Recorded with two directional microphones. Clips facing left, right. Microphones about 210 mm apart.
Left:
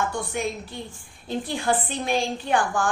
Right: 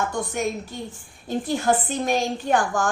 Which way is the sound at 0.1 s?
45° right (ahead or behind).